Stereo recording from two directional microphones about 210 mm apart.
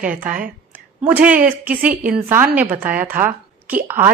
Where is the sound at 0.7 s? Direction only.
5° right (ahead or behind).